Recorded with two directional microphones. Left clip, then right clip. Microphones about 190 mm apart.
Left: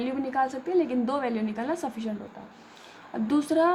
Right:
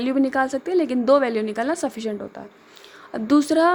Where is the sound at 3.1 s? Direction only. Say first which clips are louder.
Right 7 dB; 35° right (ahead or behind).